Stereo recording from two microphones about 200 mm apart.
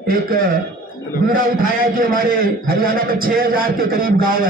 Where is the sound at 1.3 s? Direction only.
45° right (ahead or behind).